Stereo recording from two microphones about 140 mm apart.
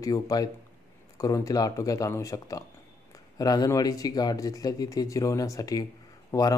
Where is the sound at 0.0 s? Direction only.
25° left (ahead or behind).